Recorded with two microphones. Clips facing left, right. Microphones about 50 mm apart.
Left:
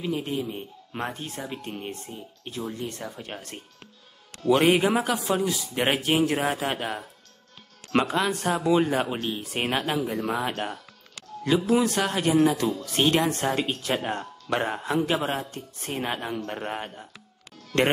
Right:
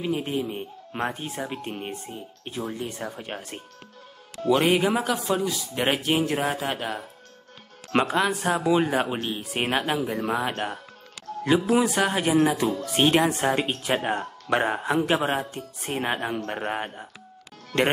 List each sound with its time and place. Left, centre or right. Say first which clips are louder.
0.0 s speech: right 2 dB; centre
4.5 s speech: left 1 dB; centre
7.9 s speech: right 1 dB; centre